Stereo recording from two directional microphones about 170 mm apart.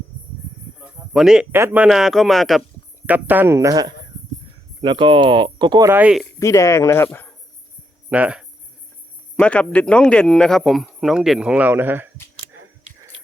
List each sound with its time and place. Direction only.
0.8 s a sound: 5° right (ahead or behind)
1.5 s speech: 10° right (ahead or behind)
3.1 s speech: 10° right (ahead or behind); by 5.9 s 25° right (ahead or behind)
5.9 s speech: 5° right (ahead or behind)
6.4 s speech: 20° left (ahead or behind)
8.1 s speech: 5° right (ahead or behind)
9.3 s speech: 5° left (ahead or behind); by 12.1 s 10° right (ahead or behind)